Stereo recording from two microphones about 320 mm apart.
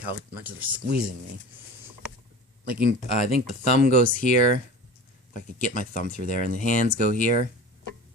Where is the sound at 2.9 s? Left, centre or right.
Left.